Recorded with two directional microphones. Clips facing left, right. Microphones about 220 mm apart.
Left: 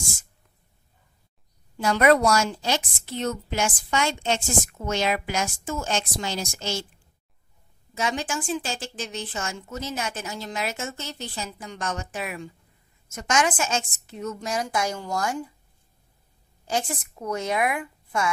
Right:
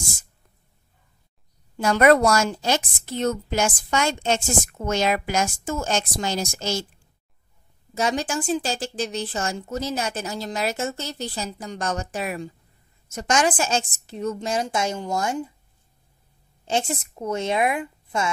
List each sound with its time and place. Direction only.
1.8 s a woman's voice: 50° right (ahead or behind)
7.9 s a woman's voice: 40° right (ahead or behind); by 15.5 s 25° right (ahead or behind)
16.6 s speech: 25° right (ahead or behind)